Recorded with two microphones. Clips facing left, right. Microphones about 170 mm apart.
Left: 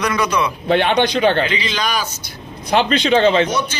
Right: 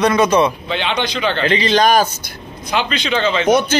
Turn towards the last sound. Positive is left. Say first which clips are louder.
# left 5 dB
turn(degrees=35)  # may be behind; listen again after turning